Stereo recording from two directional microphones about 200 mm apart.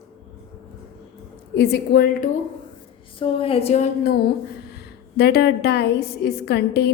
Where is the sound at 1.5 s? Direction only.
55° left (ahead or behind).